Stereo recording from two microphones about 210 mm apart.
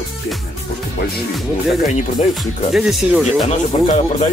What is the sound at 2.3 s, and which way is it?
Speech, centre (ahead or behind).